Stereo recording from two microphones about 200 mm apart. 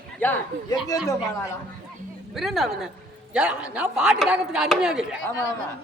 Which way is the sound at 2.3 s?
Centre (ahead or behind).